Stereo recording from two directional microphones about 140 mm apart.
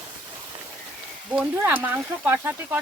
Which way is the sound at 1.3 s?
10° right (ahead or behind).